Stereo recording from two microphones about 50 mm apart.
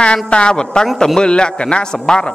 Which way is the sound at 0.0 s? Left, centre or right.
Left.